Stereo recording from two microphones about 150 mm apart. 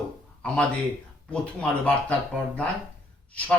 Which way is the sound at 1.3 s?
5° left (ahead or behind).